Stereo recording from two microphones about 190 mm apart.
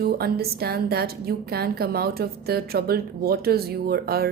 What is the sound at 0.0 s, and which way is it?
A woman's voice, 55° right (ahead or behind).